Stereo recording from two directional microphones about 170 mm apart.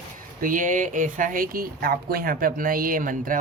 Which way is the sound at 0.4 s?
50° right (ahead or behind).